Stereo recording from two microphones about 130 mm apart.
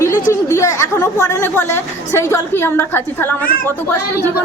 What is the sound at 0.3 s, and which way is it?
Speech, 20° left (ahead or behind).